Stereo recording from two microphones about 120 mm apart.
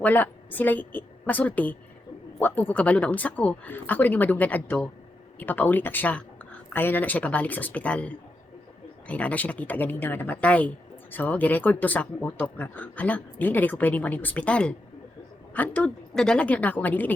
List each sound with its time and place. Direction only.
0.0 s a woman's voice: 15° left (ahead or behind)